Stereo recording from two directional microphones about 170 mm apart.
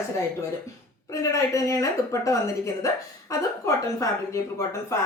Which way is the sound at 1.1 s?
20° left (ahead or behind).